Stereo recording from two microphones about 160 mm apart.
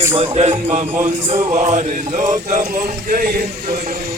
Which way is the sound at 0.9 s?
45° right (ahead or behind).